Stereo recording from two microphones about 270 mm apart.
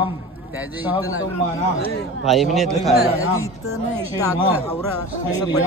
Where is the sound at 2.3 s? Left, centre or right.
Centre.